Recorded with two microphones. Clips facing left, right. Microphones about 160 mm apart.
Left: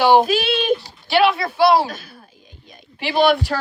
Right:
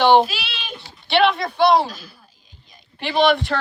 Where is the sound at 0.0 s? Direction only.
5° left (ahead or behind).